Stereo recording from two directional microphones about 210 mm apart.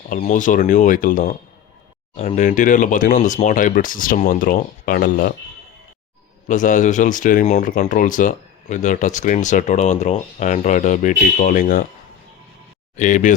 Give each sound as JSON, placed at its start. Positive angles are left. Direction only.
{"t": 0.1, "sound": "speech", "side_deg": 35}
{"t": 6.5, "sound": "speech", "side_deg": 35}
{"t": 13.0, "sound": "speech", "side_deg": 35}